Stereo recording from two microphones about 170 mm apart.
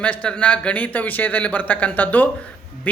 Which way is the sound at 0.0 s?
5° left (ahead or behind).